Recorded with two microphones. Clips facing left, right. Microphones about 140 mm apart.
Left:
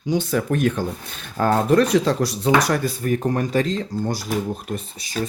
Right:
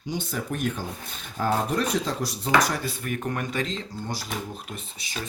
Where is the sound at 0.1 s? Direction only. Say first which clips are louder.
Left 9 dB; 80° left.